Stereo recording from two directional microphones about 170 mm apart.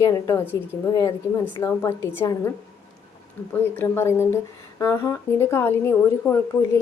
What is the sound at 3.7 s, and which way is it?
Speech, 15° left (ahead or behind).